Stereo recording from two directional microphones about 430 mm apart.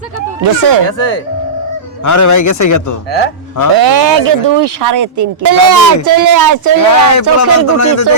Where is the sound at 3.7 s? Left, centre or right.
Right.